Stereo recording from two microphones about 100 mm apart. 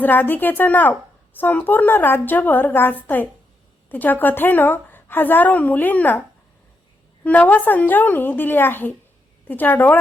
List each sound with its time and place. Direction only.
0.0 s a woman's voice: 20° left (ahead or behind)
7.3 s a woman's voice: 15° left (ahead or behind)